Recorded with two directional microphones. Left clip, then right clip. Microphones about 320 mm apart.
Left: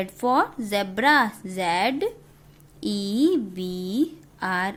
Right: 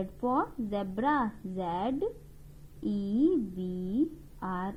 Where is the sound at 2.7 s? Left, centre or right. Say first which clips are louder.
Left 6 dB; left.